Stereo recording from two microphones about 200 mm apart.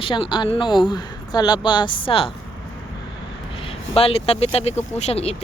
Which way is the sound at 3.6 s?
30° left (ahead or behind).